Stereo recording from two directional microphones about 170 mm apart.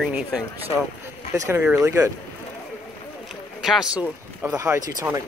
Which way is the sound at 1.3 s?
15° right (ahead or behind).